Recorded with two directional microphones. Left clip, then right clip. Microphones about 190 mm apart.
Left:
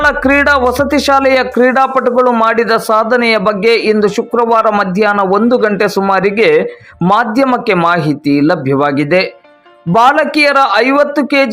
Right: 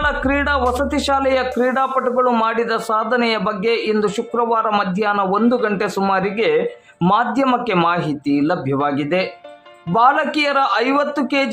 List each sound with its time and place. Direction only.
0.0 s a man's voice: 30° left (ahead or behind)